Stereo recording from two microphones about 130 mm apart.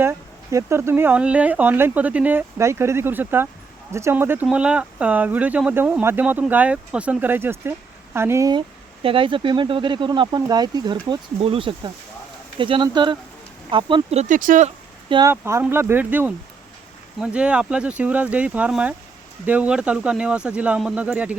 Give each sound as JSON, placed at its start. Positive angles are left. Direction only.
{"t": 0.0, "sound": "speech", "side_deg": -20}
{"t": 9.0, "sound": "speech", "side_deg": -40}
{"t": 11.3, "sound": "speech", "side_deg": -45}
{"t": 14.3, "sound": "speech", "side_deg": -85}
{"t": 15.3, "sound": "speech", "side_deg": -20}